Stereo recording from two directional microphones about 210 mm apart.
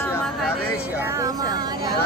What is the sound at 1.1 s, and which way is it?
Speech, 15° right (ahead or behind).